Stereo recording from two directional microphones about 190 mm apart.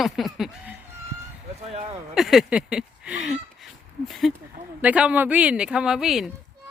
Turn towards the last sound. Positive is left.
turn(degrees=0)  # may be behind; listen again after turning